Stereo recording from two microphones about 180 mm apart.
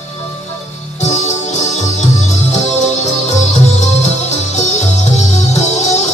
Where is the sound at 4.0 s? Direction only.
40° left (ahead or behind).